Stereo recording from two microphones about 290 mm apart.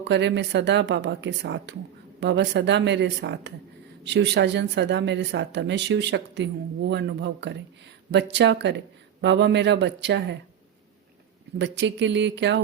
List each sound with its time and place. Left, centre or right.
0.0 s a woman's voice: right
11.5 s a woman's voice: right